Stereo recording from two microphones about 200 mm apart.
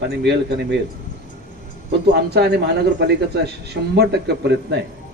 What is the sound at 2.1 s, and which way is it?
A man's voice, 55° right (ahead or behind).